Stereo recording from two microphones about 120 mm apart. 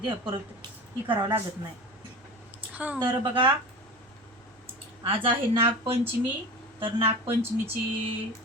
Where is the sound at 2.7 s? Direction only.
15° right (ahead or behind).